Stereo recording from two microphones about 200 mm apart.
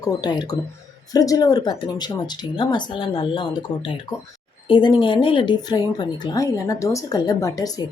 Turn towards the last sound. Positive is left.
turn(degrees=20)  # may be behind; listen again after turning